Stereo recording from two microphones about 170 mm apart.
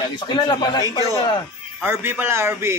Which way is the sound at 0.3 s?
25° left (ahead or behind).